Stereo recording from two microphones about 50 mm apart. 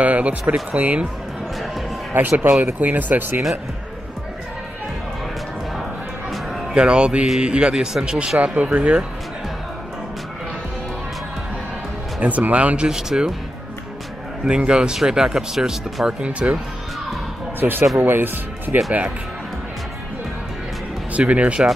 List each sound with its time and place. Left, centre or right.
0.0 s speech: right
2.1 s speech: right
6.7 s speech: centre
12.2 s speech: right
12.7 s speech: centre
14.6 s speech: centre
16.2 s speech: right
17.6 s speech: right
21.3 s speech: right